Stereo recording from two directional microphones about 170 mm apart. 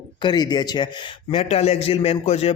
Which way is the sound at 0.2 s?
25° left (ahead or behind).